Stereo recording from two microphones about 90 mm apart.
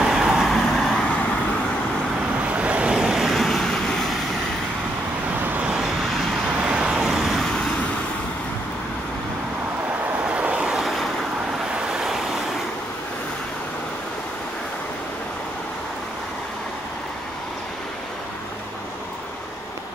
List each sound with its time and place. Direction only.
0.0 s vehicle: 5° right (ahead or behind)
2.5 s vehicle: 15° right (ahead or behind); by 4.1 s 5° left (ahead or behind)
5.4 s vehicle: 10° right (ahead or behind); by 7.9 s 10° left (ahead or behind)
10.3 s vehicle: 10° right (ahead or behind)